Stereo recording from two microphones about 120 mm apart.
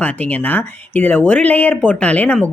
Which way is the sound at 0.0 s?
15° left (ahead or behind).